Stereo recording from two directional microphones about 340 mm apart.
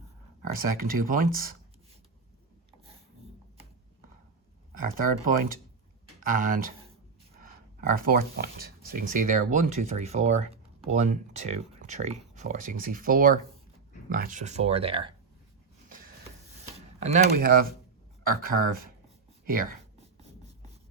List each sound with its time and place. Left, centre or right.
0.8 s speech: right
4.7 s speech: right
7.9 s speech: right
17.0 s speech: right